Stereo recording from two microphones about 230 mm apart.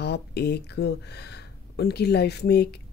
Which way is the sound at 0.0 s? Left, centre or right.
Left.